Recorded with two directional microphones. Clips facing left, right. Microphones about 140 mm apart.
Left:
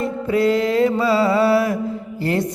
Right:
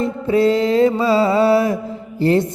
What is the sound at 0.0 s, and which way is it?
Mantra, 25° right (ahead or behind).